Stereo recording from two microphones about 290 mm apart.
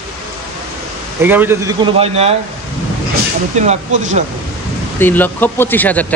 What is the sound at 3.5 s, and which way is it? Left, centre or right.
Speech, right.